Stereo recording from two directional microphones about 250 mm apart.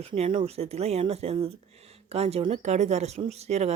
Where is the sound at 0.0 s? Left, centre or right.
Right.